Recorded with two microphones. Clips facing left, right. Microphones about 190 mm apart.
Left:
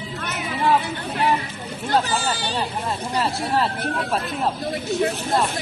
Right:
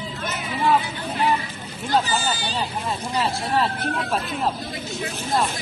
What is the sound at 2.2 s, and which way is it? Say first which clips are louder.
Speech: left 1 dB; 65° left (ahead or behind).